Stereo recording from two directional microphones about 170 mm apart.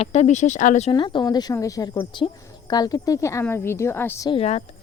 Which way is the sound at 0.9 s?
30° left (ahead or behind).